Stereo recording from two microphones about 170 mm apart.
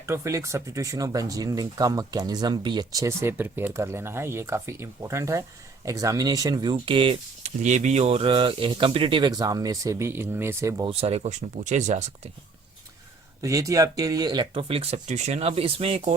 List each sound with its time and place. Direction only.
0.0 s speech: 15° right (ahead or behind)
10.8 s speech: 35° right (ahead or behind)
13.4 s speech: 20° right (ahead or behind); by 16.1 s 40° right (ahead or behind)